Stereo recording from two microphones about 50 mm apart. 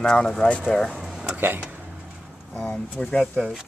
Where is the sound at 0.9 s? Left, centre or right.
Centre.